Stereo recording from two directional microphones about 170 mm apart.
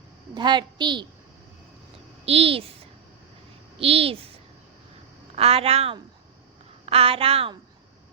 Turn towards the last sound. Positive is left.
turn(degrees=-35)  # may be behind; listen again after turning